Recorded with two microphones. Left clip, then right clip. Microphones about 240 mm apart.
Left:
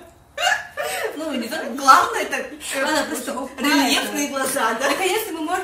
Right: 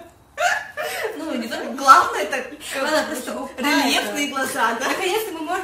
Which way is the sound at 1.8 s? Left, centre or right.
Centre.